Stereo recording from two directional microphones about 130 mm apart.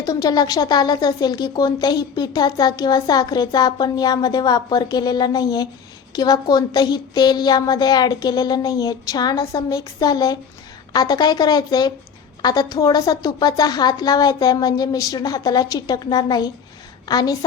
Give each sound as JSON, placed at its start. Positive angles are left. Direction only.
{"t": 0.0, "sound": "a woman's voice", "side_deg": 30}